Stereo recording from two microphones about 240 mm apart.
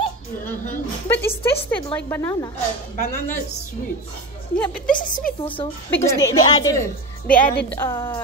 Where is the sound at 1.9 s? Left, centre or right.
Centre.